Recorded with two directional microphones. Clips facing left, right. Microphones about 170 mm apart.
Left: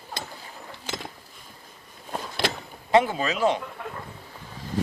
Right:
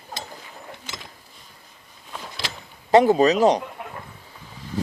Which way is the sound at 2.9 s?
40° right (ahead or behind).